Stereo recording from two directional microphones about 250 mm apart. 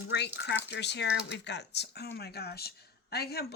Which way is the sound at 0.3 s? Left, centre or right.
Left.